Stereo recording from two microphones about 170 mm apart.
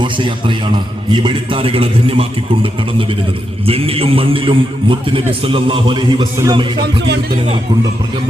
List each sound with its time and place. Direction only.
0.0 s a man's voice: 30° right (ahead or behind)
3.7 s a man's voice: 35° right (ahead or behind)